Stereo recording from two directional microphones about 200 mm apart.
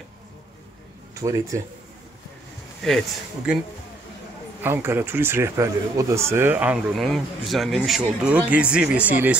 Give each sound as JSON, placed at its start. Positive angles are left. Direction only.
{"t": 1.1, "sound": "speech", "side_deg": -15}
{"t": 2.8, "sound": "speech", "side_deg": 0}
{"t": 4.6, "sound": "speech", "side_deg": -10}